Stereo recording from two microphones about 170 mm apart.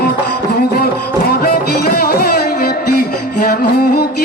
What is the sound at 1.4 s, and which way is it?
Music, 60° left (ahead or behind).